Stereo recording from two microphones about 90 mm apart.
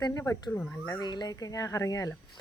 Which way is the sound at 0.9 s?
50° left (ahead or behind).